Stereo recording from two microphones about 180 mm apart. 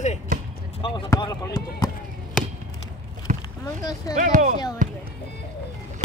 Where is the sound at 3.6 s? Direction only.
20° left (ahead or behind).